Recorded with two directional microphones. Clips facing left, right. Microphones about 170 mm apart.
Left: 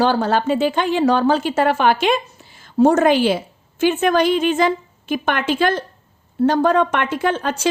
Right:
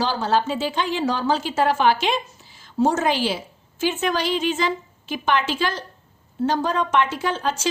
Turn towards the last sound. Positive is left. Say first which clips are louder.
# left 4 dB
turn(degrees=55)  # may be behind; listen again after turning